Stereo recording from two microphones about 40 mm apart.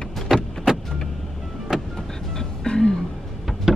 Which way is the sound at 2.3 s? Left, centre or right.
Centre.